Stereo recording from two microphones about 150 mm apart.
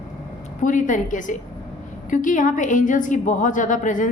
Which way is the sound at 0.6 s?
60° left (ahead or behind).